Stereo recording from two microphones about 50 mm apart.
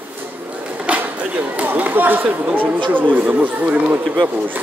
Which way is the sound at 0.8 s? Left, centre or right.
Right.